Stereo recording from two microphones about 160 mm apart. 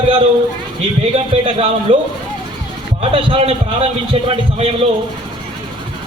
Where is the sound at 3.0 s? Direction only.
35° right (ahead or behind).